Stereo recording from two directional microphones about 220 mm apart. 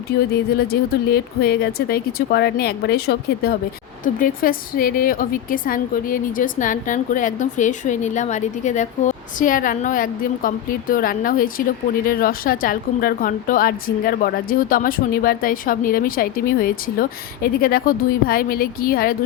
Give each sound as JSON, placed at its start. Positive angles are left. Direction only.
{"t": 0.7, "sound": "a woman's voice", "side_deg": 45}